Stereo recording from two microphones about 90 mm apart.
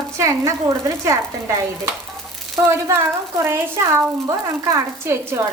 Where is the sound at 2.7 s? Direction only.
30° right (ahead or behind).